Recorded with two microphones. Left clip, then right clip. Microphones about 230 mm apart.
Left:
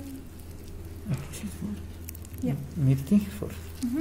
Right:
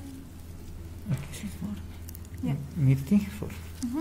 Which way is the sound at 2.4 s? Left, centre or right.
Right.